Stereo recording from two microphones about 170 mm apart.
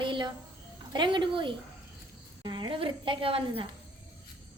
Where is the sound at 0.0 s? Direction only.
30° right (ahead or behind).